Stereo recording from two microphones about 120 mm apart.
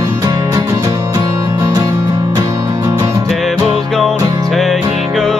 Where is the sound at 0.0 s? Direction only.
30° right (ahead or behind).